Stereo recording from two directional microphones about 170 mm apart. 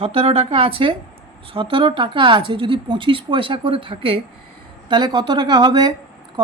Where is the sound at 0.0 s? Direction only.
35° right (ahead or behind).